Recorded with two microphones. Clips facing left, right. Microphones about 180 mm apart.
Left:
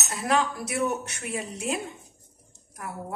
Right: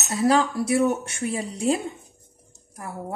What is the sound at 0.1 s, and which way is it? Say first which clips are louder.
Speech: right 6 dB; 30° right (ahead or behind).